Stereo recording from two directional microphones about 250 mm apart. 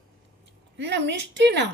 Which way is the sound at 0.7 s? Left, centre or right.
Right.